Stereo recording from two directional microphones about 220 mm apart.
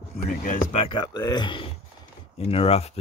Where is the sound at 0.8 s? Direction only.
20° left (ahead or behind).